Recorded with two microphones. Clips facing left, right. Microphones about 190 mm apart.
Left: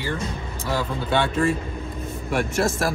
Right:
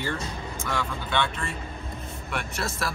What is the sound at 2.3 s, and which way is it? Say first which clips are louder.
Speech: left 10 dB; 50° left (ahead or behind).